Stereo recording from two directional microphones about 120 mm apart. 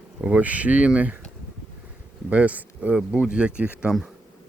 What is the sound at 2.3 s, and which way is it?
Speech, 10° right (ahead or behind).